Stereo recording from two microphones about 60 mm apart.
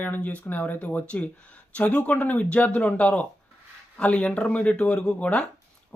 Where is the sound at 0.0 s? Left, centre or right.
Left.